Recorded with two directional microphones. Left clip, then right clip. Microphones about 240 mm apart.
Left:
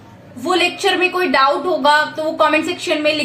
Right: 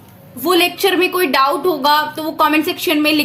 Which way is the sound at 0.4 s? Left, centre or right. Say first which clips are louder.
Right 2 dB; right.